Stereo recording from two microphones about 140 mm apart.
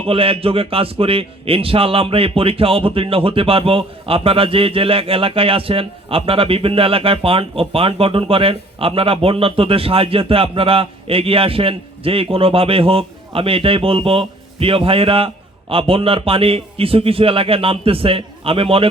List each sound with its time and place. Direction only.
0.0 s a man's voice: 40° right (ahead or behind)